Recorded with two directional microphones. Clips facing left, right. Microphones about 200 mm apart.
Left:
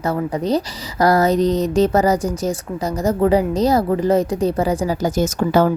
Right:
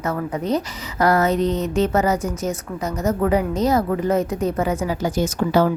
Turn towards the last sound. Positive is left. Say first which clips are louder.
# left 2 dB
turn(degrees=45)  # may be behind; listen again after turning